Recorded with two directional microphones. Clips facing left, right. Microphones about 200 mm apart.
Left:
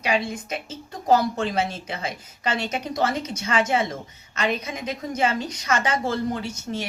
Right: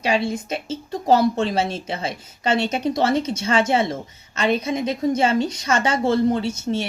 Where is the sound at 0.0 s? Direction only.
25° right (ahead or behind).